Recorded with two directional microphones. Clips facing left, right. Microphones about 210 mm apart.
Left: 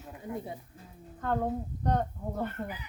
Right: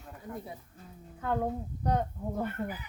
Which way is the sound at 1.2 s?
5° right (ahead or behind).